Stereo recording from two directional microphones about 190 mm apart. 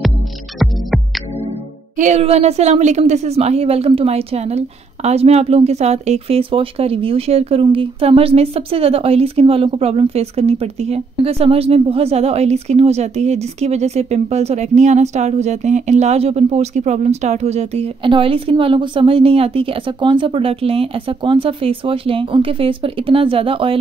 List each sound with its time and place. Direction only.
0.6 s music: centre (ahead or behind)
2.0 s a woman's voice: 40° right (ahead or behind)